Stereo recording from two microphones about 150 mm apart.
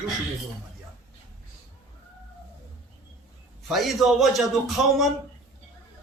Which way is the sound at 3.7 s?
Centre (ahead or behind).